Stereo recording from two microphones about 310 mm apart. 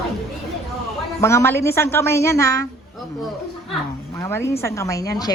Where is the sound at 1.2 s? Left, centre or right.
Centre.